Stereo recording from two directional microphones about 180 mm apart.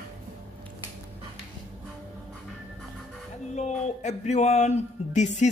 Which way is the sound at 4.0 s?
40° left (ahead or behind).